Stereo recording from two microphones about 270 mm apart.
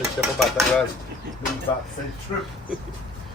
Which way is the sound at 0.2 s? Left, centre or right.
Centre.